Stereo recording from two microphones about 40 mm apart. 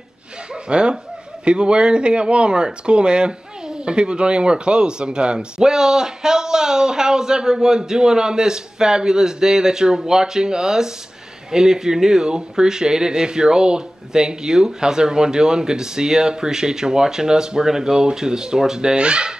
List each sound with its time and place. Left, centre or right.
0.7 s speech: right